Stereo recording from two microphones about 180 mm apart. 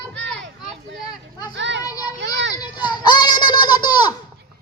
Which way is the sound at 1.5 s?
80° right.